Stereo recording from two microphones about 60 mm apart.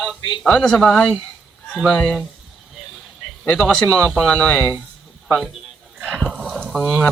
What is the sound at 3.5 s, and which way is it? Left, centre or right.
Speech, centre.